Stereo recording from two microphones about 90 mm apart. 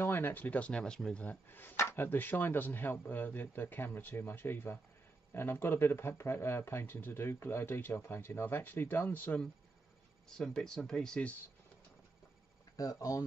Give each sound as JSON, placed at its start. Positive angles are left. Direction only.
{"t": 0.0, "sound": "speech", "side_deg": 25}
{"t": 10.3, "sound": "speech", "side_deg": 5}
{"t": 12.7, "sound": "speech", "side_deg": 40}